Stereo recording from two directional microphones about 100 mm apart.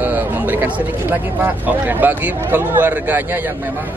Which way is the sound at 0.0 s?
20° right (ahead or behind).